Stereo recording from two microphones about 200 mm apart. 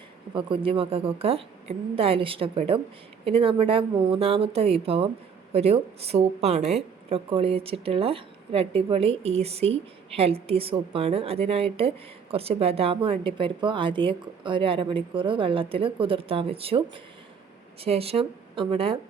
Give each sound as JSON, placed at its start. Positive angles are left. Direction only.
{"t": 0.3, "sound": "a woman's voice", "side_deg": -25}